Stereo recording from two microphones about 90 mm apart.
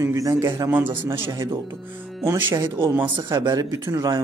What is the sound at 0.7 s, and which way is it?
Speech, 20° right (ahead or behind).